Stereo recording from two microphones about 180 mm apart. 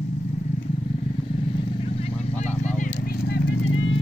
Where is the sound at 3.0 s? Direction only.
55° left (ahead or behind); by 3.9 s 90° left.